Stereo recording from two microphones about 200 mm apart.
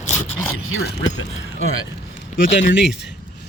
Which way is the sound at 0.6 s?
80° left.